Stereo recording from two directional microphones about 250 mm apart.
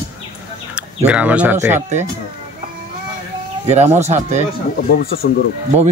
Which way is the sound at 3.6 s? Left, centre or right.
Right.